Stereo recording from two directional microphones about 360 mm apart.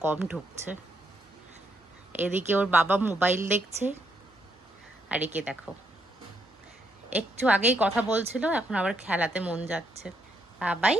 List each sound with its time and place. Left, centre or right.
0.0 s a woman's voice: centre
2.2 s a woman's voice: centre
5.0 s a woman's voice: centre
7.2 s a woman's voice: centre